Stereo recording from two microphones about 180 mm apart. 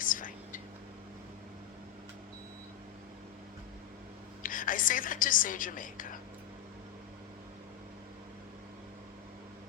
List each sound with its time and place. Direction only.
0.0 s whispering: 50° left (ahead or behind)
4.4 s a woman's voice: 50° left (ahead or behind)